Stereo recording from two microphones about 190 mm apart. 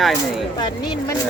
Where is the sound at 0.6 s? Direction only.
25° left (ahead or behind).